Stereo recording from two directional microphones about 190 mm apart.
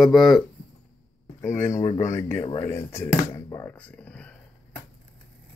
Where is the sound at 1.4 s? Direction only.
40° left (ahead or behind).